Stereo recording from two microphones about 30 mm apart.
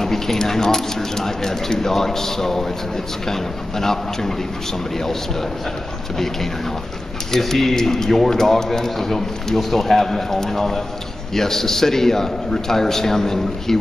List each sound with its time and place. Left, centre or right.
0.0 s speech: centre
7.3 s speech: centre